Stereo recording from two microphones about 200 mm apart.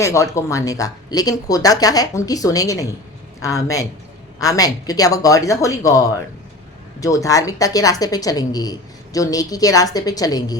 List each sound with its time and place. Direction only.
0.0 s a woman's voice: 15° left (ahead or behind)